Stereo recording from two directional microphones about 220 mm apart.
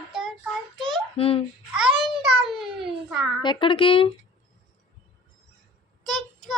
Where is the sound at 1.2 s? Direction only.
25° left (ahead or behind).